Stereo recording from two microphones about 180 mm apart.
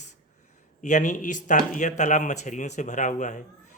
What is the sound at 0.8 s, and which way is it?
Speech, 45° left (ahead or behind).